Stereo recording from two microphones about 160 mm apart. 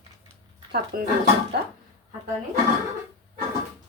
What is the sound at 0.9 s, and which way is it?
Speech, 65° right (ahead or behind).